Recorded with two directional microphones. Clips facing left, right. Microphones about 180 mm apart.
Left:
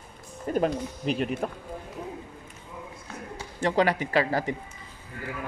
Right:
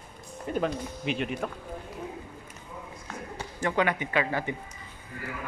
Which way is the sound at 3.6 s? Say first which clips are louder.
Left 3 dB; 35° left (ahead or behind).